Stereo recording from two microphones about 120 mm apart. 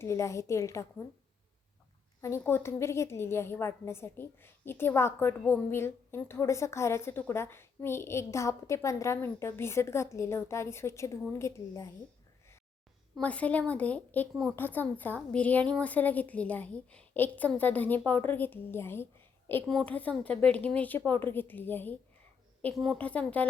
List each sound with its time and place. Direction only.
0.0 s a woman's voice: 25° left (ahead or behind)
2.2 s a woman's voice: 20° left (ahead or behind)
13.1 s a woman's voice: 10° left (ahead or behind)
19.6 s a woman's voice: 5° left (ahead or behind)
22.7 s a woman's voice: centre (ahead or behind)
23.0 s a woman's voice: 10° left (ahead or behind)